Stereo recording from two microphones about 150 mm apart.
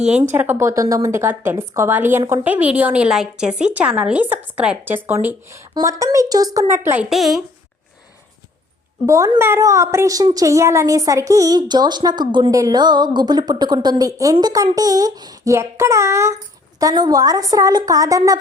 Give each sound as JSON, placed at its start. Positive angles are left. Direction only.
{"t": 0.0, "sound": "a woman's voice", "side_deg": -10}
{"t": 7.1, "sound": "a woman's voice", "side_deg": 0}
{"t": 9.0, "sound": "a woman's voice", "side_deg": -20}